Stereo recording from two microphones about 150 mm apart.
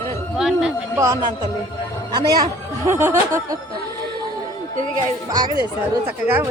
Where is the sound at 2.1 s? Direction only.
25° right (ahead or behind).